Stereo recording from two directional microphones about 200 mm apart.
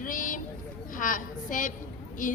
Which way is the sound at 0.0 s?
40° left (ahead or behind).